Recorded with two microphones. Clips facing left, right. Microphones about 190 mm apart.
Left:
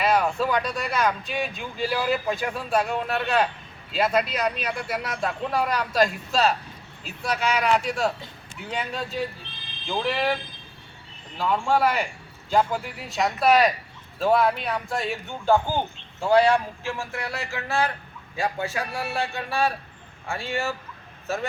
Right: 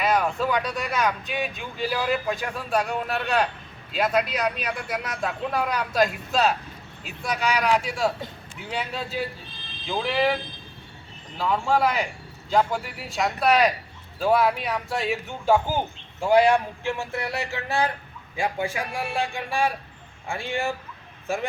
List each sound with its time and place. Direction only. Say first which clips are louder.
0.0 s speech: left 1 dB; centre (ahead or behind)
11.3 s speech: even; centre (ahead or behind)